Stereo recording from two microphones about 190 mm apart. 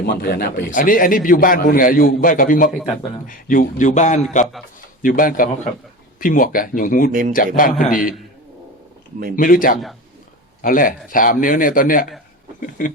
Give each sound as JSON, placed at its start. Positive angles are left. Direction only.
{"t": 0.0, "sound": "a man's voice", "side_deg": 55}
{"t": 7.1, "sound": "speech", "side_deg": -45}
{"t": 7.3, "sound": "a man's voice", "side_deg": 45}
{"t": 9.3, "sound": "a man's voice", "side_deg": 45}
{"t": 12.5, "sound": "a sound", "side_deg": 45}